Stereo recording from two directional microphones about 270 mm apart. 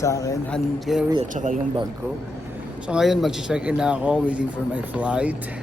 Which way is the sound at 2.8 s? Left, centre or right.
Centre.